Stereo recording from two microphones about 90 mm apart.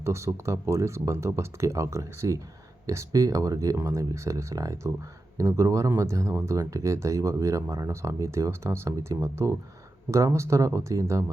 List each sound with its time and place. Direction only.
0.0 s speech: 30° right (ahead or behind)